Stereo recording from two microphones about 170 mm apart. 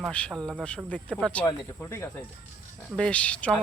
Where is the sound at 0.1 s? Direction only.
5° left (ahead or behind).